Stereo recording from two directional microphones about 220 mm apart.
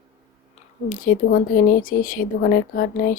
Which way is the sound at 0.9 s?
40° left (ahead or behind).